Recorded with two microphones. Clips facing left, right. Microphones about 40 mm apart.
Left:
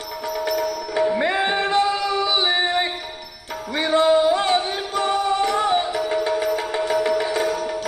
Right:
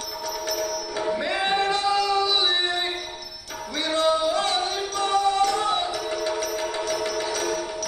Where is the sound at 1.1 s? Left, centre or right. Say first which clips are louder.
Left 3 dB; left.